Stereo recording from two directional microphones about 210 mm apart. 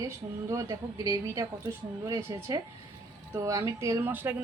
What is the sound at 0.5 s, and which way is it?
A woman's voice, 15° right (ahead or behind).